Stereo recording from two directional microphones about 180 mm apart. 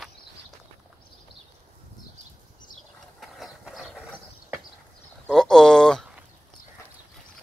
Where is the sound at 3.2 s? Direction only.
Centre (ahead or behind).